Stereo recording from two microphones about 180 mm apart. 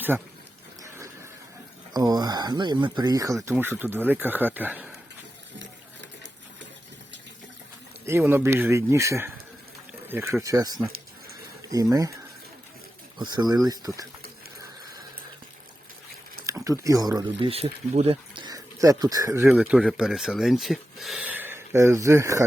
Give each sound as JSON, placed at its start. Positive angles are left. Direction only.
{"t": 0.1, "sound": "speech", "side_deg": -5}
{"t": 0.8, "sound": "a sound", "side_deg": -15}
{"t": 1.9, "sound": "speech", "side_deg": -20}
{"t": 8.0, "sound": "speech", "side_deg": -10}
{"t": 16.5, "sound": "speech", "side_deg": -15}
{"t": 19.5, "sound": "speech", "side_deg": -5}